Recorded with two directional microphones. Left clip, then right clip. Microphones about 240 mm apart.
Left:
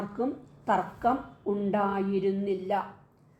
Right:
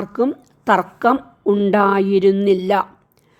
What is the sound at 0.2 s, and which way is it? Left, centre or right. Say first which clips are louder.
Speech: right 14 dB; right.